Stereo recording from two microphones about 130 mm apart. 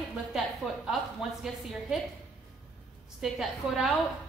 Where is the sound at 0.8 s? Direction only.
5° right (ahead or behind).